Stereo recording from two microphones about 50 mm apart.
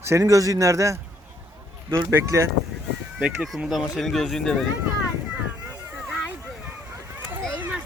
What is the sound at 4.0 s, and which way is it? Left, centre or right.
Speech, centre.